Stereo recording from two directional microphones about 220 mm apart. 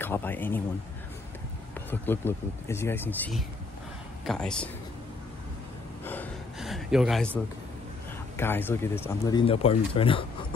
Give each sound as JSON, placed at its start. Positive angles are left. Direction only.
{"t": 0.0, "sound": "speech", "side_deg": 10}
{"t": 1.9, "sound": "speech", "side_deg": 10}
{"t": 6.0, "sound": "gasp", "side_deg": 5}
{"t": 8.4, "sound": "speech", "side_deg": 10}